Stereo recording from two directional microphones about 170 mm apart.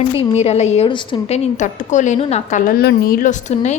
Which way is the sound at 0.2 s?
40° left (ahead or behind).